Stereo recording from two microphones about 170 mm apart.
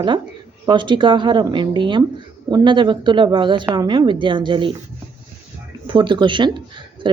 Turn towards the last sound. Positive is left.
turn(degrees=-25)  # may be behind; listen again after turning